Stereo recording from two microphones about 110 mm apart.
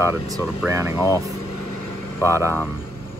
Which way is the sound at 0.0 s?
25° right (ahead or behind).